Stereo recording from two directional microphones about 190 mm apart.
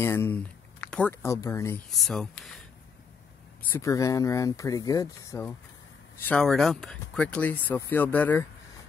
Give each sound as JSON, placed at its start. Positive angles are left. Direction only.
{"t": 0.0, "sound": "speech", "side_deg": 10}
{"t": 1.9, "sound": "speech", "side_deg": 0}
{"t": 3.7, "sound": "speech", "side_deg": 15}